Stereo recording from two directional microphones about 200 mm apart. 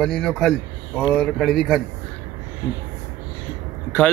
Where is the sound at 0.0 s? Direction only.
5° left (ahead or behind).